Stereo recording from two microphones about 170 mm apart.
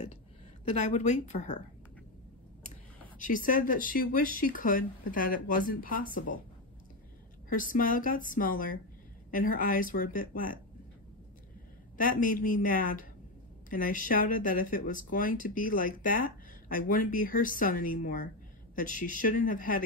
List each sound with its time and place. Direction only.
0.7 s speech: 45° left (ahead or behind)
3.2 s speech: 50° left (ahead or behind)
7.4 s speech: 55° left (ahead or behind)
12.0 s speech: 55° left (ahead or behind)